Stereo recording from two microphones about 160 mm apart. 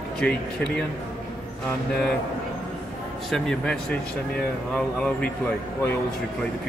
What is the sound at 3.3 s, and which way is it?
A man's voice, 5° left (ahead or behind).